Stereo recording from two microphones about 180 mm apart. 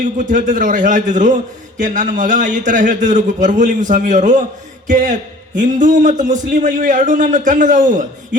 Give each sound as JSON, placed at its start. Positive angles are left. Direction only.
{"t": 0.0, "sound": "a man's voice", "side_deg": -45}